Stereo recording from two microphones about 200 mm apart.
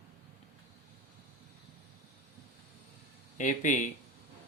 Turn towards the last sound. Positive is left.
turn(degrees=40)  # may be behind; listen again after turning